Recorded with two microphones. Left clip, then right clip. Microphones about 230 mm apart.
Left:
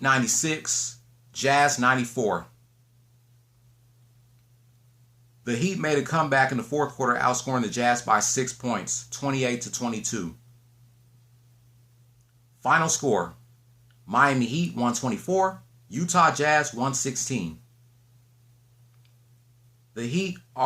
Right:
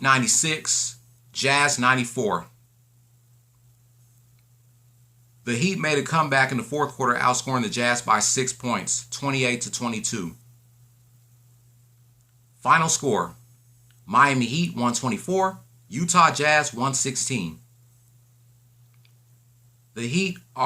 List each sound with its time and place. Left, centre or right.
0.0 s speech: centre
5.4 s speech: centre
12.6 s speech: centre
19.9 s speech: centre